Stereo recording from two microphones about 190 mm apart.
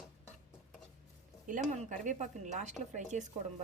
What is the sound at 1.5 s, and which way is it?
A woman's voice, 40° right (ahead or behind).